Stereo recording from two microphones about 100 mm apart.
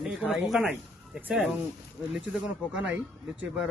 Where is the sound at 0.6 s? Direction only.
15° right (ahead or behind).